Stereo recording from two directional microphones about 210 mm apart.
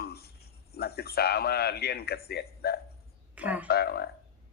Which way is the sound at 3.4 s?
5° right (ahead or behind).